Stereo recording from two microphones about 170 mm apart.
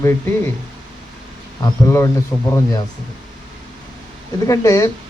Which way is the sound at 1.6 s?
15° left (ahead or behind).